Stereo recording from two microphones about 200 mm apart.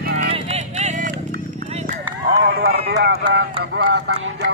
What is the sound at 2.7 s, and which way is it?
Run, 55° right (ahead or behind).